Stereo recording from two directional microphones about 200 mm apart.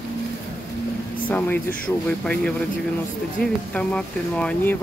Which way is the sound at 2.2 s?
5° left (ahead or behind).